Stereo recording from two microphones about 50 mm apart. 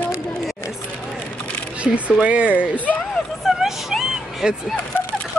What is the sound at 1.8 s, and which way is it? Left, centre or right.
Speech, right.